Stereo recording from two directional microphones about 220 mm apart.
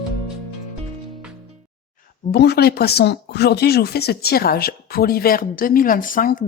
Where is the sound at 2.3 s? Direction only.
50° left (ahead or behind).